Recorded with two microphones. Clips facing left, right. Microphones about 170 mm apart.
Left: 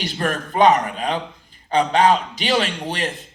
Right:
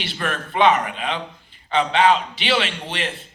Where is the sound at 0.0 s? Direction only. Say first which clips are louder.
Left 3 dB; 40° left (ahead or behind).